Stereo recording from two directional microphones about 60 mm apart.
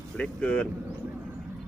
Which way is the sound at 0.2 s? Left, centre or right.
Left.